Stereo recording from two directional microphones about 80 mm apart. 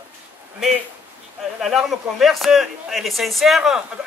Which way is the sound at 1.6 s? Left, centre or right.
Centre.